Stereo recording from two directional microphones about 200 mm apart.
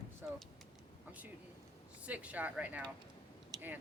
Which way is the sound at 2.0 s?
5° right (ahead or behind).